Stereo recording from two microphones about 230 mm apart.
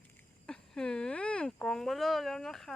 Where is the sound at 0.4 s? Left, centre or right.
Centre.